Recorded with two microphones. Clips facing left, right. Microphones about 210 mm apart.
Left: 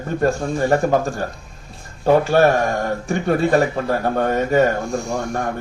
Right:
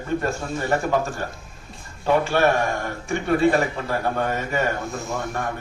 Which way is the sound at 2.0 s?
40° left (ahead or behind).